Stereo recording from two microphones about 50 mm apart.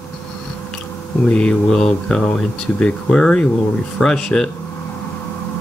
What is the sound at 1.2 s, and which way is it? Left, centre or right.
Speech, centre.